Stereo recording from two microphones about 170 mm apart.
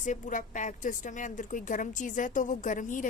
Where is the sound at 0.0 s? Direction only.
50° left (ahead or behind).